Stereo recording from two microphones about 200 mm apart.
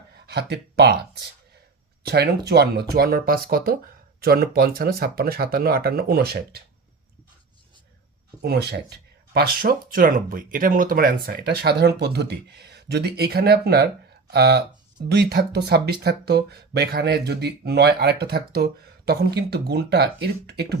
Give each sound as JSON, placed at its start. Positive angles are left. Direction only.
{"t": 0.3, "sound": "speech", "side_deg": -55}
{"t": 8.4, "sound": "speech", "side_deg": -55}